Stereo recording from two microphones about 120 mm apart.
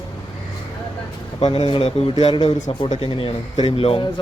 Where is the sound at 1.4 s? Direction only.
55° left (ahead or behind).